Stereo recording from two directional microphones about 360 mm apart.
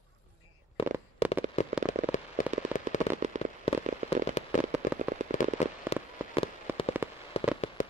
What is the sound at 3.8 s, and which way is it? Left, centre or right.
Fireworks, centre.